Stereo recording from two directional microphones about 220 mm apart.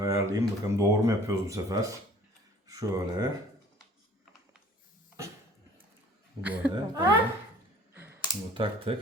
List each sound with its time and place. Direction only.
0.0 s speech: 15° right (ahead or behind)
6.4 s speech: 5° right (ahead or behind)
7.9 s a sound: 10° right (ahead or behind)
8.5 s speech: 25° right (ahead or behind)